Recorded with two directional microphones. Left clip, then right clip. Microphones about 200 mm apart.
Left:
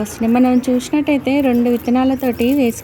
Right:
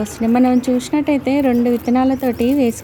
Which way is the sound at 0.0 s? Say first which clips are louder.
Even; centre (ahead or behind).